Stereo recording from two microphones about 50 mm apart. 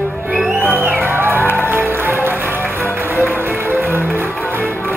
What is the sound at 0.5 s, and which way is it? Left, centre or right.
Music, right.